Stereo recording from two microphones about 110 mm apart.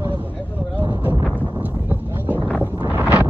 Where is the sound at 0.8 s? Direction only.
30° right (ahead or behind).